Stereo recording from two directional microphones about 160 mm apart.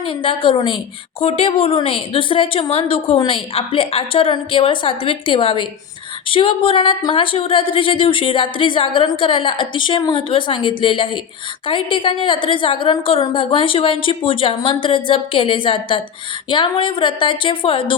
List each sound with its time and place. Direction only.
0.0 s speech: 35° left (ahead or behind)